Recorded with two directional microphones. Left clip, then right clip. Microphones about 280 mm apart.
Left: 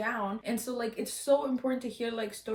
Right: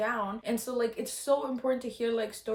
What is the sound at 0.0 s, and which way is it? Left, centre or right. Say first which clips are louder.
Speech: right 2 dB; centre.